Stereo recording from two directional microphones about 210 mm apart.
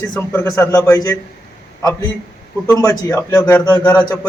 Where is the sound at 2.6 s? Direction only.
15° left (ahead or behind).